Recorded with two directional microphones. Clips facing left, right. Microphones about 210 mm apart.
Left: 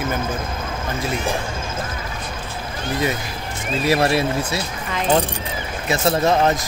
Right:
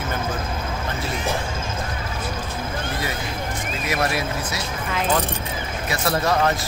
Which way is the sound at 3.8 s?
30° left (ahead or behind).